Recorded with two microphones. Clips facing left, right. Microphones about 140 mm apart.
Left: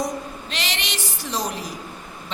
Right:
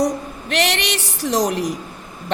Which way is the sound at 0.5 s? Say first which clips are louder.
Right 11 dB; 65° right (ahead or behind).